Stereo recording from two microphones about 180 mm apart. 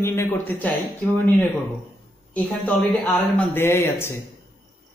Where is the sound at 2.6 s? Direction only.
10° left (ahead or behind).